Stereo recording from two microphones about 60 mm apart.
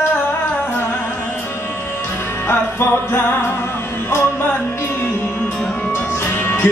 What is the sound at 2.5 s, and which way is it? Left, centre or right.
Music, left.